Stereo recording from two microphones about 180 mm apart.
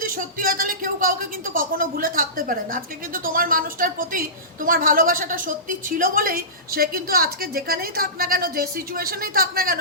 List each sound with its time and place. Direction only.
0.0 s a woman's voice: 50° right (ahead or behind)